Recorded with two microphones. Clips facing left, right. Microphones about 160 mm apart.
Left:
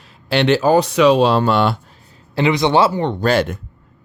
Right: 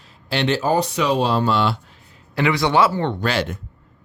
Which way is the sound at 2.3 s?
20° left (ahead or behind).